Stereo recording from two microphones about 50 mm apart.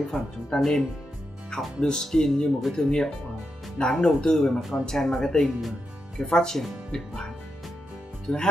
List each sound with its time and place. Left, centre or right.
0.0 s speech: centre
5.6 s music: centre
6.2 s speech: centre